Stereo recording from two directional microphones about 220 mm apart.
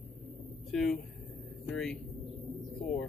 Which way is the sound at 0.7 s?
Centre (ahead or behind).